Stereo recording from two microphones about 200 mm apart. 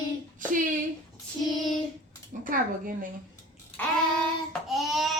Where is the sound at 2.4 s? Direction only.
45° right (ahead or behind).